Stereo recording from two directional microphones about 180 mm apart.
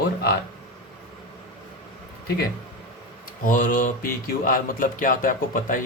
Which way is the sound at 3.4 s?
45° left (ahead or behind).